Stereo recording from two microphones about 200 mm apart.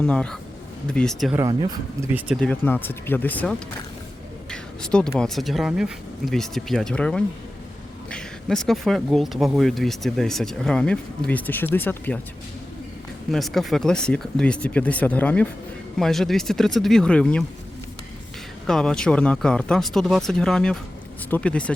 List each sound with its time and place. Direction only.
0.0 s speech: 5° left (ahead or behind)
1.4 s speech: 15° right (ahead or behind)
2.1 s speech: 5° right (ahead or behind)
4.5 s speech: 5° left (ahead or behind)
13.3 s speech: centre (ahead or behind)
18.6 s speech: 5° left (ahead or behind)